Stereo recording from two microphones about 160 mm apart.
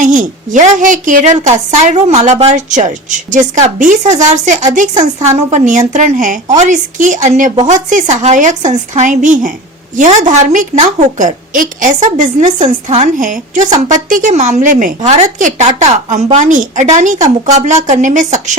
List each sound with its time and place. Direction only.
0.0 s a woman's voice: 55° right (ahead or behind)